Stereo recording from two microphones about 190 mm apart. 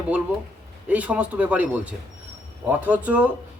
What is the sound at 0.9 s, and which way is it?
A man's voice, 5° right (ahead or behind).